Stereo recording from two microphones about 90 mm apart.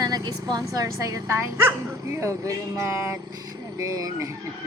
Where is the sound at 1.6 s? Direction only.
30° right (ahead or behind).